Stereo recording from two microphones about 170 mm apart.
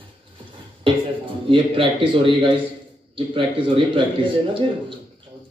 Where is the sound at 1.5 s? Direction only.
30° right (ahead or behind).